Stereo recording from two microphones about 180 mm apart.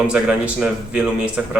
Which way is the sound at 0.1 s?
5° right (ahead or behind).